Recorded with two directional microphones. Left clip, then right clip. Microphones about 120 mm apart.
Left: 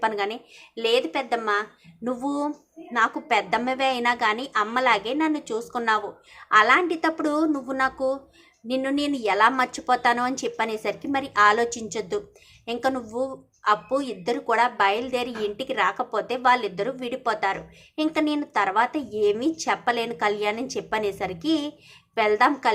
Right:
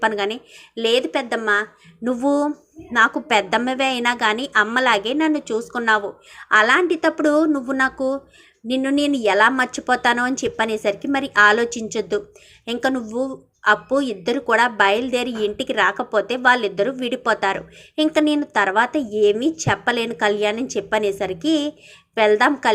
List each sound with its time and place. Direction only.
0.0 s speech: 25° right (ahead or behind)